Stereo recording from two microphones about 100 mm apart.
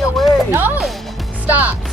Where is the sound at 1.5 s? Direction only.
15° right (ahead or behind).